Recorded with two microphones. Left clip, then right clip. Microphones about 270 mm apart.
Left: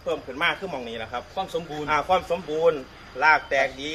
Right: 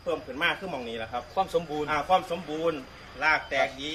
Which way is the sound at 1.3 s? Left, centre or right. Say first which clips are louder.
Right 3 dB; centre.